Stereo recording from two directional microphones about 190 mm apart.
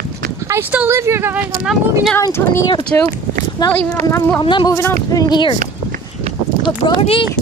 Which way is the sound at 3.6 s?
25° left (ahead or behind).